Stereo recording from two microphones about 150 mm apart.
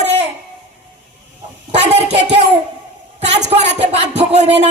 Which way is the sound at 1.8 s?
50° right (ahead or behind).